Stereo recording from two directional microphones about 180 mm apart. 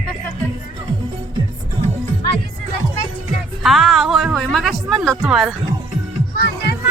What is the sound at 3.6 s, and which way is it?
A woman's voice, centre (ahead or behind).